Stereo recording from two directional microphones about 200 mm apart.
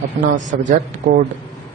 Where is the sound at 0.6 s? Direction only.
45° right (ahead or behind).